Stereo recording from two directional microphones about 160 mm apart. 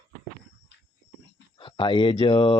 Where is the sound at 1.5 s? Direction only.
30° left (ahead or behind).